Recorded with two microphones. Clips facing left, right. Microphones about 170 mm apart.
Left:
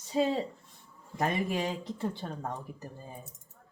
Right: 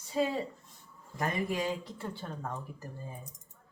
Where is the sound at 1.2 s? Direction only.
20° left (ahead or behind).